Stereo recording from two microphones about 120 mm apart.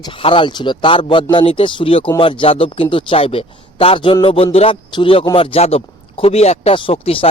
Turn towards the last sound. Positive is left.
turn(degrees=50)  # may be behind; listen again after turning